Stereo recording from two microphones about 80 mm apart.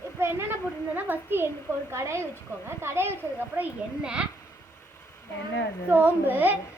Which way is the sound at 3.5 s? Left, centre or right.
Centre.